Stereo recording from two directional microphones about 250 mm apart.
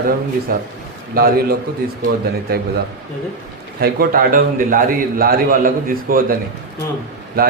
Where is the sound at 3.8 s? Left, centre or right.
Right.